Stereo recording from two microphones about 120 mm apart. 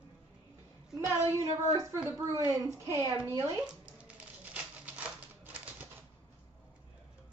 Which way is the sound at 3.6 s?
10° right (ahead or behind).